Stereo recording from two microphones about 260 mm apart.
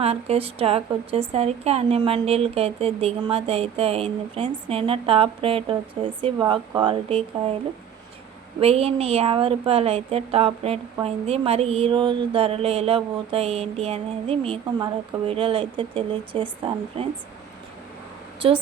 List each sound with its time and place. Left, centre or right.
0.0 s a woman's voice: right
8.6 s a woman's voice: right
18.4 s a woman's voice: centre